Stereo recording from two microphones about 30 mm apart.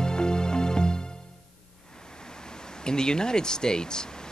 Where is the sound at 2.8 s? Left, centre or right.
Left.